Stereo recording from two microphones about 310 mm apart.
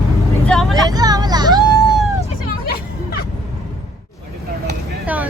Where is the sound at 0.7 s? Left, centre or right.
Centre.